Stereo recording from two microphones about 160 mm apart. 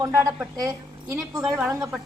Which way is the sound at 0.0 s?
20° right (ahead or behind).